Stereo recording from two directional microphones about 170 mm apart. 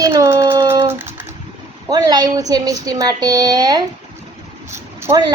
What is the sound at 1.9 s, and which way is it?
A woman's voice, 25° right (ahead or behind).